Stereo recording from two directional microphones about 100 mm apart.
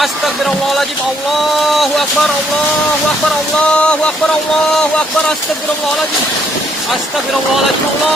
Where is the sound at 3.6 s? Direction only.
10° left (ahead or behind).